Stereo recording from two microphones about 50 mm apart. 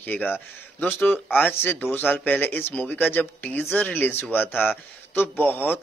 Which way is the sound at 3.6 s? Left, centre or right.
Left.